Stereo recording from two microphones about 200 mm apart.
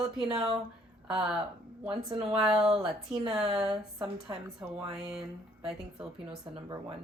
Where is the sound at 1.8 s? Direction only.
30° right (ahead or behind).